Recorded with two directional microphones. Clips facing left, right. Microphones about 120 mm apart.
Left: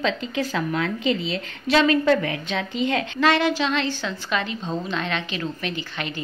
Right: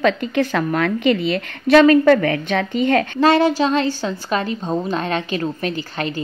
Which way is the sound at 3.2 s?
35° right (ahead or behind).